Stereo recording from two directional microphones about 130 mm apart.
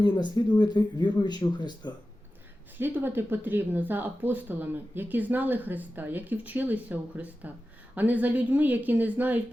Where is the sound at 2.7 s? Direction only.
15° right (ahead or behind).